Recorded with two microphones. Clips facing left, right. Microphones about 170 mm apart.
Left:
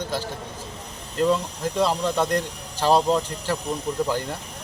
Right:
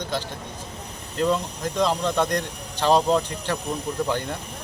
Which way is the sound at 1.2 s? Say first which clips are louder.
Left 1 dB; 5° left (ahead or behind).